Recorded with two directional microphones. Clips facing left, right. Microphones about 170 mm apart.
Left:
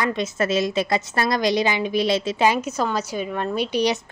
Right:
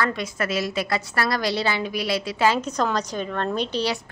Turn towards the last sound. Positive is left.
turn(degrees=15)  # may be behind; listen again after turning